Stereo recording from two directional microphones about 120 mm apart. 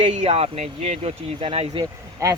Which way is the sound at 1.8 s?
25° right (ahead or behind).